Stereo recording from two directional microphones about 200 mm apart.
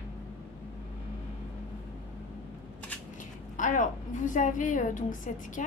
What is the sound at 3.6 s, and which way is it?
A woman's voice, 40° left (ahead or behind).